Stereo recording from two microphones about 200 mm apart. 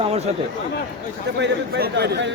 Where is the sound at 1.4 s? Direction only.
55° right (ahead or behind).